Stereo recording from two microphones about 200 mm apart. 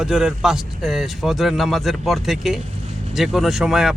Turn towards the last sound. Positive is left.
turn(degrees=0)  # may be behind; listen again after turning